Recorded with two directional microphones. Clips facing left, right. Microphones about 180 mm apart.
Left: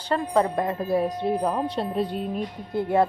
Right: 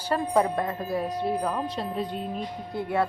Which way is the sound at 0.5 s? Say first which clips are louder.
Left 4 dB; 25° left (ahead or behind).